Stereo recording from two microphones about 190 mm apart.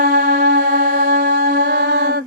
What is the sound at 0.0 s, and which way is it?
Music, 55° right (ahead or behind).